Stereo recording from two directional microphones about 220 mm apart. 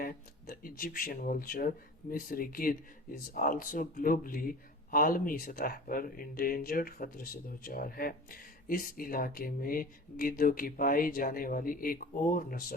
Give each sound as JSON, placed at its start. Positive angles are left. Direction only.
{"t": 0.0, "sound": "speech", "side_deg": 40}